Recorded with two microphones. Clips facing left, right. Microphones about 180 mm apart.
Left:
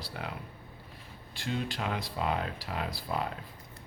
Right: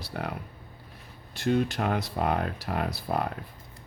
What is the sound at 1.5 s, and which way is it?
Speech, 50° right (ahead or behind).